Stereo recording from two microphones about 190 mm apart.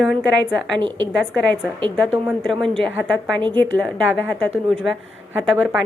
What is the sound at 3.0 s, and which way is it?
Speech, centre (ahead or behind).